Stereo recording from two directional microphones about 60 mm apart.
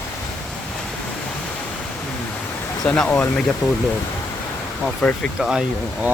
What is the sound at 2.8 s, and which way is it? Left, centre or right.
Speech, centre.